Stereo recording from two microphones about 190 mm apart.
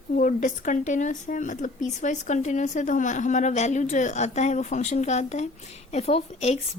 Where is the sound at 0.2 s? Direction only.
40° left (ahead or behind).